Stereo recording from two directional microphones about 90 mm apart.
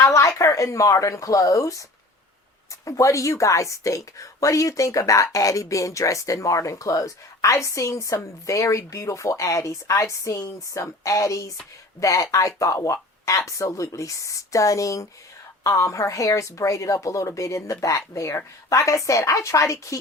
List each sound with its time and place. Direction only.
0.0 s a woman's voice: 35° left (ahead or behind)
2.8 s a woman's voice: 40° left (ahead or behind)